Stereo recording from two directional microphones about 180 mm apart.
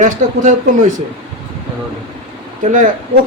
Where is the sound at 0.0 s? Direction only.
45° right (ahead or behind).